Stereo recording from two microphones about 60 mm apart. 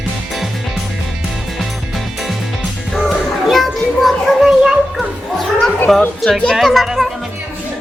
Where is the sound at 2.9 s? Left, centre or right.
Centre.